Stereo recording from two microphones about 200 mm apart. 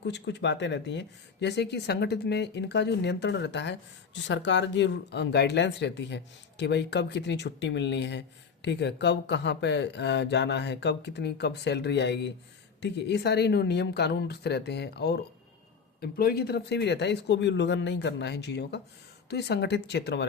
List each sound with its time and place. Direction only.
0.0 s speech: 60° left (ahead or behind)